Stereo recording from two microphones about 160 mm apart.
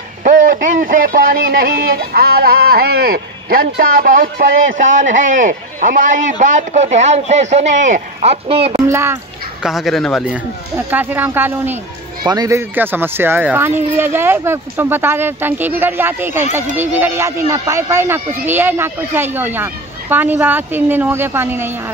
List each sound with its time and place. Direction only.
0.2 s speech: 55° right (ahead or behind); by 8.7 s 40° right (ahead or behind)
8.7 s speech: 15° right (ahead or behind)
9.6 s speech: centre (ahead or behind)
10.9 s speech: 10° right (ahead or behind)
12.2 s speech: 25° right (ahead or behind)